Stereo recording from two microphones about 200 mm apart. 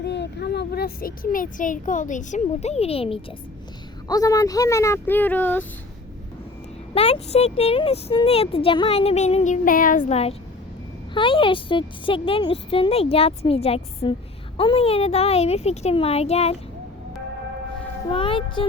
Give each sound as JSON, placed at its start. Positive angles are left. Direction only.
{"t": 0.0, "sound": "speech", "side_deg": 60}
{"t": 4.1, "sound": "speech", "side_deg": 15}
{"t": 6.9, "sound": "a woman's voice", "side_deg": 30}
{"t": 18.1, "sound": "a woman's voice", "side_deg": 25}